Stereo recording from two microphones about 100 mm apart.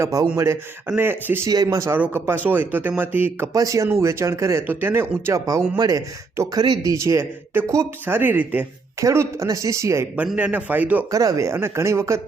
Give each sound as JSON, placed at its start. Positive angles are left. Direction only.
{"t": 0.0, "sound": "speech", "side_deg": -35}
{"t": 1.5, "sound": "speech", "side_deg": -35}
{"t": 2.1, "sound": "speech", "side_deg": -20}
{"t": 3.5, "sound": "speech", "side_deg": -35}
{"t": 6.3, "sound": "speech", "side_deg": -30}
{"t": 6.6, "sound": "speech", "side_deg": -40}
{"t": 6.9, "sound": "speech", "side_deg": -30}
{"t": 9.0, "sound": "speech", "side_deg": -30}
{"t": 10.3, "sound": "speech", "side_deg": -15}
{"t": 11.1, "sound": "speech", "side_deg": -35}